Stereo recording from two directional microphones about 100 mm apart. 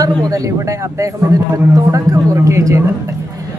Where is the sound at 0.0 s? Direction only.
35° right (ahead or behind).